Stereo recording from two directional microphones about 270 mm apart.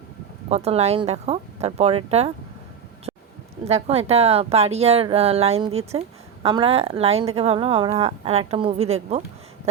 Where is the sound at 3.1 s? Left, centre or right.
Centre.